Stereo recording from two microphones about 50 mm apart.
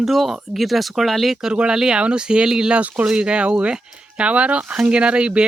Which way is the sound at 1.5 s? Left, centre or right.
Centre.